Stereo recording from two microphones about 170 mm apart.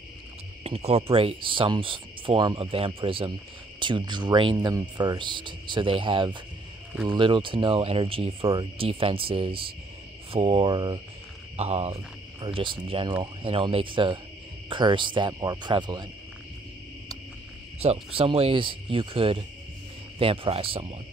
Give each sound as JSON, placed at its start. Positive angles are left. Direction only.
{"t": 0.7, "sound": "speech", "side_deg": -35}
{"t": 11.5, "sound": "speech", "side_deg": -40}
{"t": 17.7, "sound": "speech", "side_deg": -35}